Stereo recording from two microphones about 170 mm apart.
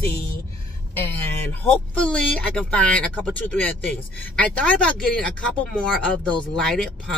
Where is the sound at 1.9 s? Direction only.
5° left (ahead or behind).